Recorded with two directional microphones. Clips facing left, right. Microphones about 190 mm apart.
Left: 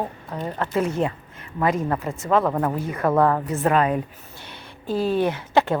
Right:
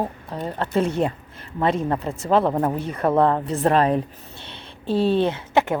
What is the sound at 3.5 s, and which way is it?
Speech, 35° right (ahead or behind).